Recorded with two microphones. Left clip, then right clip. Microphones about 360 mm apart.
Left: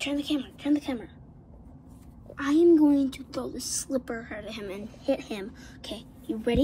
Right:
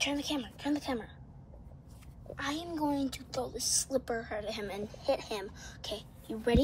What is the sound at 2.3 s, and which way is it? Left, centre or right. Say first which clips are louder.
A woman's voice: left 15 dB; centre.